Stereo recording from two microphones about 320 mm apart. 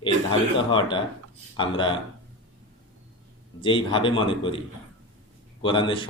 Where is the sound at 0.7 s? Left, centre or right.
Centre.